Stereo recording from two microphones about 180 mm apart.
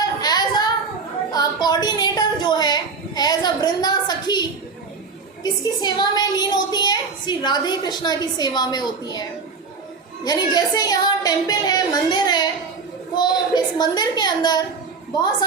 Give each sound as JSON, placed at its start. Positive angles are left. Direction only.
{"t": 0.0, "sound": "a sound", "side_deg": 20}
{"t": 5.4, "sound": "a child's voice", "side_deg": 20}
{"t": 10.2, "sound": "a woman's voice", "side_deg": 20}